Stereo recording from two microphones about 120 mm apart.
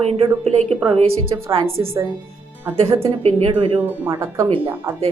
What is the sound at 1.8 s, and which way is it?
Speech, 20° right (ahead or behind).